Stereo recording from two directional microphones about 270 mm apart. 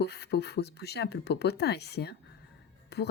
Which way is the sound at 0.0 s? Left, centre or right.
Left.